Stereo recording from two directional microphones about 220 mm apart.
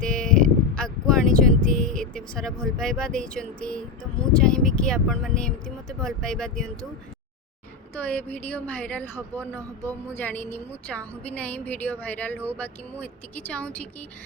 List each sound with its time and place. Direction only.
0.0 s a sound: 5° left (ahead or behind)
4.3 s speech: 5° left (ahead or behind)
7.9 s a woman's voice: 5° left (ahead or behind)